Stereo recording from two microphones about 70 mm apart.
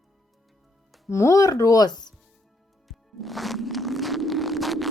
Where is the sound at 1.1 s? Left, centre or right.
Left.